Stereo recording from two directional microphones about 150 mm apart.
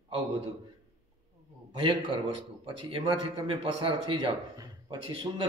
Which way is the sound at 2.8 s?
35° right (ahead or behind).